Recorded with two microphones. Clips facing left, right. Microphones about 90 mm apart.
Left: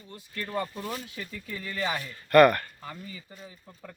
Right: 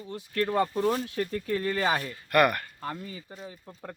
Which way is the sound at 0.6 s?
45° right (ahead or behind).